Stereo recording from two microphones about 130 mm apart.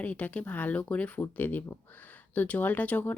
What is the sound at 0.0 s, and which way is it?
Speech, 10° left (ahead or behind).